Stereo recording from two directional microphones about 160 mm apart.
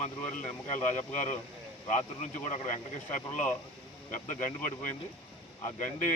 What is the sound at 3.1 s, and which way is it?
Speech, 50° left (ahead or behind).